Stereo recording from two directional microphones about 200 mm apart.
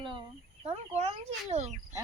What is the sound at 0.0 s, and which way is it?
Speech, 25° right (ahead or behind).